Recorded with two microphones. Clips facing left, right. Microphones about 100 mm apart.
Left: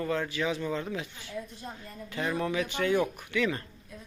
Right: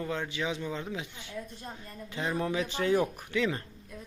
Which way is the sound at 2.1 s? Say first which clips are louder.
Left 1 dB; 20° right (ahead or behind).